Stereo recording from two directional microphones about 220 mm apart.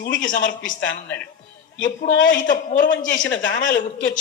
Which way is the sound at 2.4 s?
35° left (ahead or behind).